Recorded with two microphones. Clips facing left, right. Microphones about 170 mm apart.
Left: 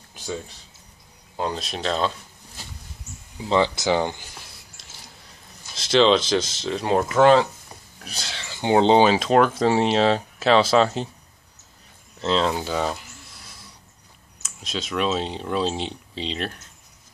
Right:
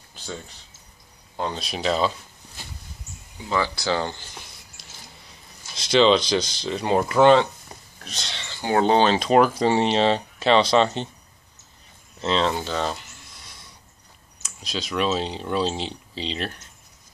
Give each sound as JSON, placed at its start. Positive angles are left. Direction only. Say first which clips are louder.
{"t": 0.1, "sound": "a sound", "louder": "left 4 dB", "side_deg": 15}
{"t": 1.3, "sound": "speech", "louder": "left 1 dB", "side_deg": 5}
{"t": 3.4, "sound": "speech", "louder": "left 4 dB", "side_deg": 20}
{"t": 5.8, "sound": "speech", "louder": "even", "side_deg": 0}
{"t": 8.5, "sound": "speech", "louder": "left 3 dB", "side_deg": 20}
{"t": 9.0, "sound": "speech", "louder": "even", "side_deg": 5}
{"t": 12.2, "sound": "a sound", "louder": "left 1 dB", "side_deg": 0}
{"t": 14.4, "sound": "speech", "louder": "even", "side_deg": 0}